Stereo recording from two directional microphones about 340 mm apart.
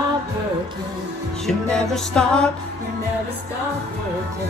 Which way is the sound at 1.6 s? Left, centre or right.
Centre.